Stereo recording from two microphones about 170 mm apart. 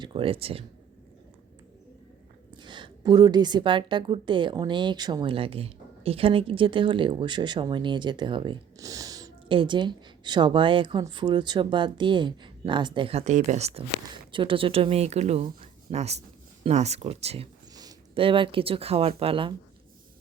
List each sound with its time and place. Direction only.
0.0 s speech: 30° right (ahead or behind)
2.6 s a woman's voice: 25° right (ahead or behind)